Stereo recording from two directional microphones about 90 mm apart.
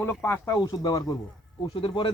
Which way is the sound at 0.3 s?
30° left (ahead or behind).